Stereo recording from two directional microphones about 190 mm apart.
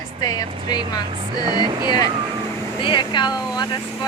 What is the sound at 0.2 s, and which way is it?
Speech, 20° left (ahead or behind).